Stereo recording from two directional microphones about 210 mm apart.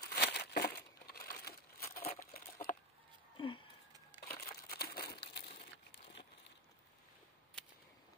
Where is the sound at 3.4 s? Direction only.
25° left (ahead or behind).